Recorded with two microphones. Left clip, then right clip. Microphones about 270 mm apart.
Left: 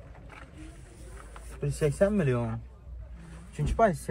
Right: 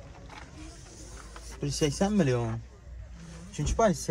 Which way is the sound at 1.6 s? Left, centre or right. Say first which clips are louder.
Left 3 dB; right.